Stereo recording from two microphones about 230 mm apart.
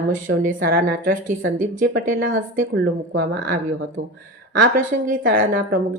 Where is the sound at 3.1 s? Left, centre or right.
Right.